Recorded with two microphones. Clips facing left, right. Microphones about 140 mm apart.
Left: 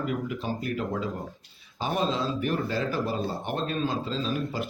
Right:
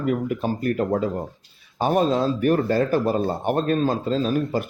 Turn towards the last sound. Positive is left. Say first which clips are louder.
# right 7 dB
turn(degrees=-45)  # may be behind; listen again after turning